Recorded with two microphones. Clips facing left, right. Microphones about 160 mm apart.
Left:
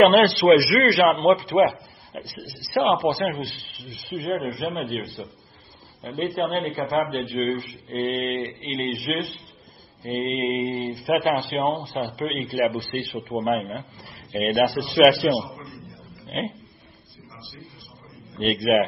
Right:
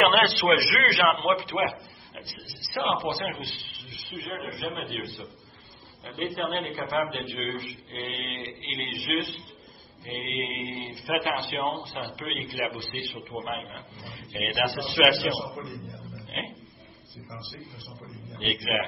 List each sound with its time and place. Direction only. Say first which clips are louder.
0.0 s a man's voice: left 8 dB; 35° left (ahead or behind); by 13.8 s 65° left (ahead or behind)
14.3 s a man's voice: left 8 dB; 40° left (ahead or behind)
16.3 s dog: left 9 dB; 35° left (ahead or behind)
18.4 s speech: left 10 dB; 50° left (ahead or behind)